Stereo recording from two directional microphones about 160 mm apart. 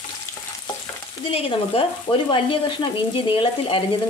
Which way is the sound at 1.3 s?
35° left (ahead or behind).